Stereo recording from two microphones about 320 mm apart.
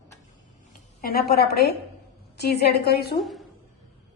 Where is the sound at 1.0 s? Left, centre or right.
Left.